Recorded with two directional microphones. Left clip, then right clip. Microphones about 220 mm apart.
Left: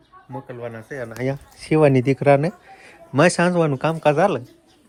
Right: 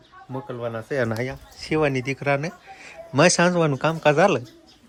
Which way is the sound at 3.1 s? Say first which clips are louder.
Left 1 dB; centre (ahead or behind).